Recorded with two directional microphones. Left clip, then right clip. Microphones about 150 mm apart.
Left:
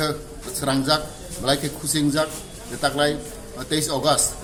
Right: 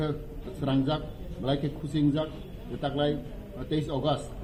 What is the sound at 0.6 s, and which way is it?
Speech, 20° left (ahead or behind).